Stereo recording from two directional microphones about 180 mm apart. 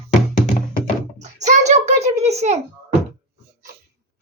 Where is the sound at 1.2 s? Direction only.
40° right (ahead or behind).